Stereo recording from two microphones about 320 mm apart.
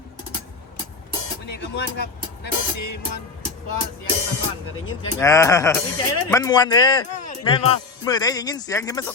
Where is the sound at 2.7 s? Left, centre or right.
Left.